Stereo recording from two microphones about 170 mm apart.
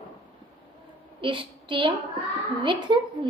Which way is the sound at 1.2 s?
30° right (ahead or behind).